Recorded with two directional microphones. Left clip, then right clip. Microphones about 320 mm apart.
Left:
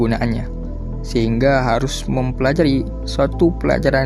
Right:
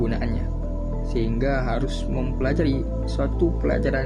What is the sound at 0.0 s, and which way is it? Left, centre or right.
Music, left.